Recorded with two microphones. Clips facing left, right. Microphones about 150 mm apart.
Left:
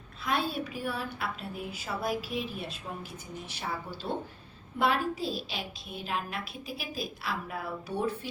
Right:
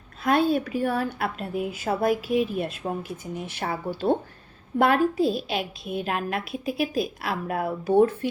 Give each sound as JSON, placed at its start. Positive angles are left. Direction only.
{"t": 0.8, "sound": "a woman's voice", "side_deg": -50}